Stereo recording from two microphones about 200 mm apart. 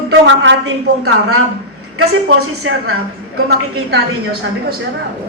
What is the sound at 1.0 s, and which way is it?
A woman's voice, 90° right.